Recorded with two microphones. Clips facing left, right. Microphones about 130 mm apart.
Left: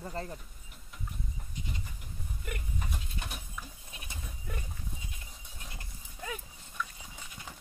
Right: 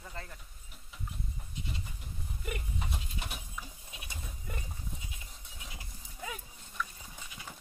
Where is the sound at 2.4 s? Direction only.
5° right (ahead or behind).